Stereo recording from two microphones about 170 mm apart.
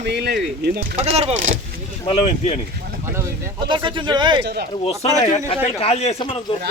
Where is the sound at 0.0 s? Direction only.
80° right.